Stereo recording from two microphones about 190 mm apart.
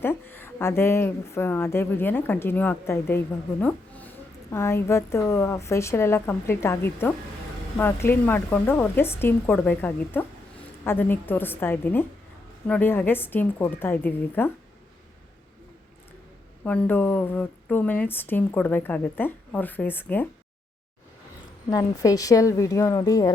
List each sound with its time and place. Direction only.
0.0 s speech: 10° left (ahead or behind)
16.6 s speech: 10° left (ahead or behind)
21.7 s speech: 20° left (ahead or behind)